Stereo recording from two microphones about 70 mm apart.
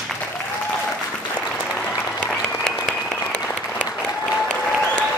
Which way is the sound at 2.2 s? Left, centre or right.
Centre.